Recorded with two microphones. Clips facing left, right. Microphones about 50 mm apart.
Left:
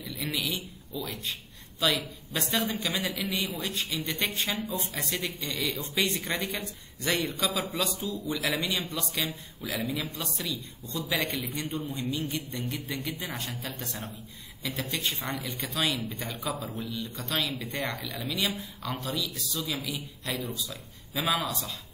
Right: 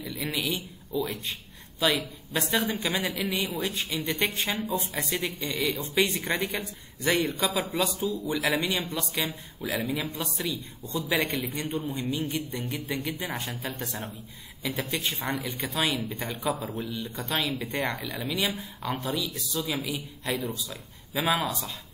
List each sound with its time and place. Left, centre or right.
0.0 s speech: centre
16.3 s a man's voice: centre
16.6 s speech: right
17.1 s speech: centre